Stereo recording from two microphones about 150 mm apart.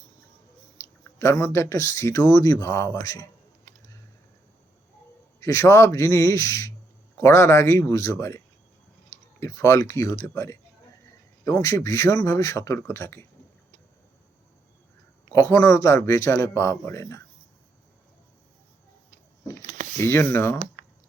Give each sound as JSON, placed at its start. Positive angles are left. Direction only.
{"t": 0.8, "sound": "speech", "side_deg": 20}
{"t": 5.4, "sound": "speech", "side_deg": 20}
{"t": 15.3, "sound": "speech", "side_deg": 20}
{"t": 19.6, "sound": "a sound", "side_deg": -55}
{"t": 20.0, "sound": "speech", "side_deg": 15}